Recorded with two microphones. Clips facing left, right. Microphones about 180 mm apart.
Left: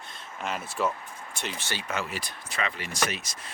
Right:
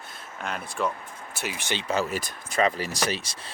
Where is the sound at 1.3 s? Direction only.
5° right (ahead or behind).